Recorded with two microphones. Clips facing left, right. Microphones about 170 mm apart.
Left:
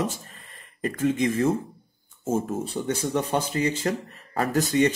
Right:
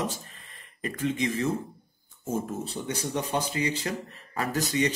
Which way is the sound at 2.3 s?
25° left (ahead or behind).